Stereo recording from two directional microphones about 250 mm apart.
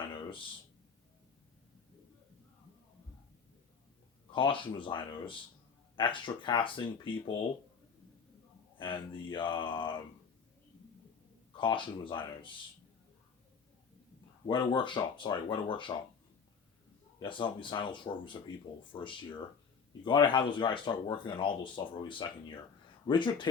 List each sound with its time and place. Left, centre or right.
0.2 s a sound: centre
4.3 s speech: centre
8.8 s speech: centre
11.6 s speech: centre
14.4 s speech: centre
17.2 s speech: centre